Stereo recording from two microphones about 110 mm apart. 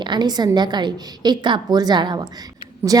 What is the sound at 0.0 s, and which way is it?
A woman's voice, 45° right (ahead or behind).